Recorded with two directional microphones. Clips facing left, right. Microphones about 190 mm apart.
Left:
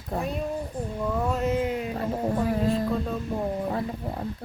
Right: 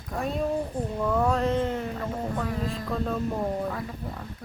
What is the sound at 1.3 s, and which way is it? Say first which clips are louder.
Speech: even; 5° left (ahead or behind).